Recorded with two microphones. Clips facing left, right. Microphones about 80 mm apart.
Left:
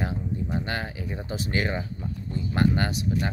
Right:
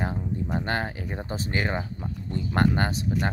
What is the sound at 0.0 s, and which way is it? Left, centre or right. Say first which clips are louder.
Speech: right 1 dB; right.